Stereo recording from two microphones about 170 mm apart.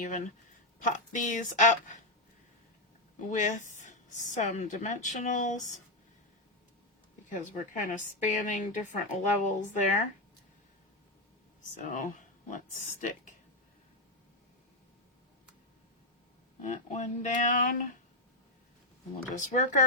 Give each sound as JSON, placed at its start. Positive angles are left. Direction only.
{"t": 0.0, "sound": "a woman's voice", "side_deg": 50}
{"t": 3.2, "sound": "a woman's voice", "side_deg": 45}
{"t": 7.3, "sound": "a woman's voice", "side_deg": 50}
{"t": 11.8, "sound": "a woman's voice", "side_deg": 45}
{"t": 16.6, "sound": "a woman's voice", "side_deg": 45}
{"t": 19.5, "sound": "a woman's voice", "side_deg": 45}